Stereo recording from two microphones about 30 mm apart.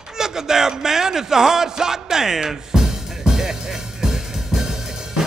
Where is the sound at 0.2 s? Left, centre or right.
Centre.